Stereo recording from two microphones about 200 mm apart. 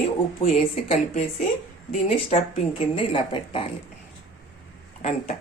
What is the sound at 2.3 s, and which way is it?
A woman's voice, 35° left (ahead or behind).